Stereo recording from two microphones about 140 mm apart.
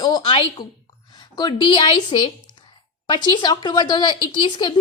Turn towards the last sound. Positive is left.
turn(degrees=35)  # may be behind; listen again after turning